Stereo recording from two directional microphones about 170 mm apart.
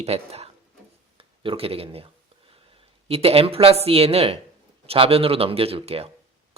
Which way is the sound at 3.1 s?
35° right (ahead or behind).